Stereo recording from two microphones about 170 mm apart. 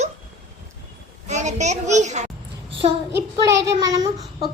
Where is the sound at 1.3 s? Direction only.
45° right (ahead or behind).